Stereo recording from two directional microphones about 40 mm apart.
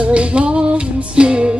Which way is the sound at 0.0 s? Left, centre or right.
Right.